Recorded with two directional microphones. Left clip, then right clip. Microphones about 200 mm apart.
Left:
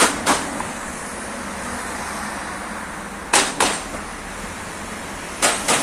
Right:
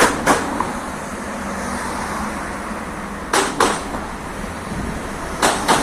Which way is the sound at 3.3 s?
50° left (ahead or behind).